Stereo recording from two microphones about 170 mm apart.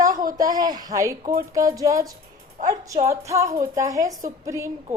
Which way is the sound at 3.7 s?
20° right (ahead or behind).